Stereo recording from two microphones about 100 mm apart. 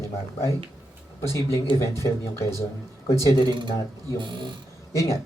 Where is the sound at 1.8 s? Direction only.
30° left (ahead or behind).